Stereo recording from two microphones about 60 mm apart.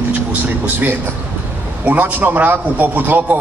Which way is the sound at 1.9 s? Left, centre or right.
Right.